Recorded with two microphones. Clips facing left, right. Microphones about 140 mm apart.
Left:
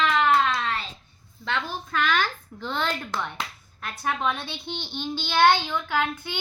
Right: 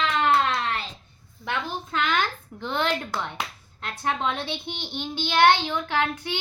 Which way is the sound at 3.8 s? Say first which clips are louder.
Right 1 dB; 25° right (ahead or behind).